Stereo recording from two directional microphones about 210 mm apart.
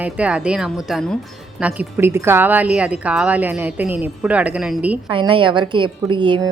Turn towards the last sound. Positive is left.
turn(degrees=-20)  # may be behind; listen again after turning